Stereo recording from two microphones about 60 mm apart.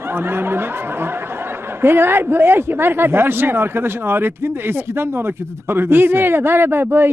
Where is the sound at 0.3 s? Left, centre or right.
Right.